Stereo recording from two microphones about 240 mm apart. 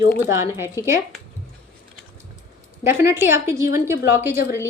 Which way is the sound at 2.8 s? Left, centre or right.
Centre.